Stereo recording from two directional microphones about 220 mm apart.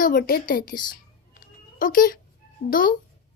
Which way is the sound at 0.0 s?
40° left (ahead or behind).